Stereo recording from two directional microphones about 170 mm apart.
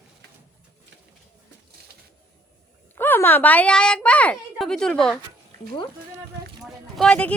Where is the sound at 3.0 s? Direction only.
10° left (ahead or behind).